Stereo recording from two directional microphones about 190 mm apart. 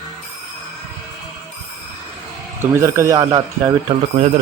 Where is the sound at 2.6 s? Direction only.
15° right (ahead or behind).